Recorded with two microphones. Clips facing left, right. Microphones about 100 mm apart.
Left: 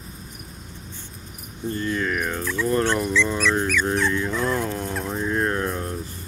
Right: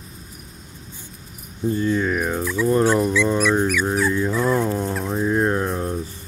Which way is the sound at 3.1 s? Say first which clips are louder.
Right 3 dB; 15° right (ahead or behind).